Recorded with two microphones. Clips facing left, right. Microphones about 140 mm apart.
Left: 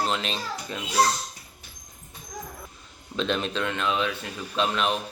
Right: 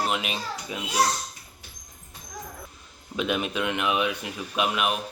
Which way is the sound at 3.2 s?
10° right (ahead or behind).